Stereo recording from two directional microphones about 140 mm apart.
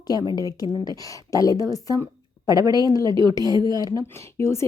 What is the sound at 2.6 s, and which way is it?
A woman's voice, 25° right (ahead or behind).